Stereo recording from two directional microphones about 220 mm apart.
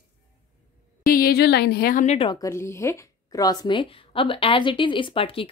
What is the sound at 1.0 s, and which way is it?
A woman's voice, 40° left (ahead or behind).